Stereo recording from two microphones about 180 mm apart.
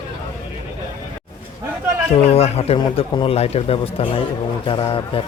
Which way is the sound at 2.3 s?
35° left (ahead or behind).